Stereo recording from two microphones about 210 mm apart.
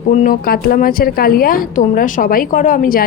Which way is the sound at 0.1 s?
40° left (ahead or behind).